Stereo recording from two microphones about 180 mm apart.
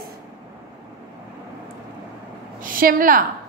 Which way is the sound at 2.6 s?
50° right (ahead or behind).